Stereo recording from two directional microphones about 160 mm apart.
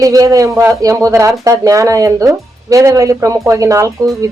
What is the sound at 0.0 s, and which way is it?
A woman's voice, 20° right (ahead or behind).